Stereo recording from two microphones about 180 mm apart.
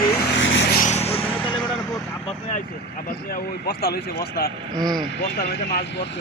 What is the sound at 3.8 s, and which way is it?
Speech, 60° left (ahead or behind).